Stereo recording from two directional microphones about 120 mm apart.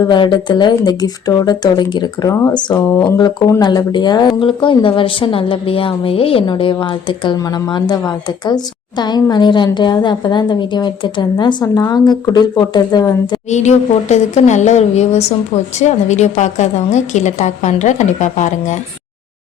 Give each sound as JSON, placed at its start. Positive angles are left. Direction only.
{"t": 0.0, "sound": "a woman's voice", "side_deg": 40}
{"t": 6.5, "sound": "a woman's voice", "side_deg": 40}
{"t": 11.6, "sound": "speech", "side_deg": 30}
{"t": 13.5, "sound": "a woman's voice", "side_deg": 75}